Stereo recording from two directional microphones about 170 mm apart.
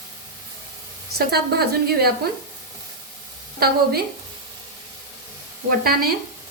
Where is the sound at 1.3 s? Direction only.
65° right (ahead or behind).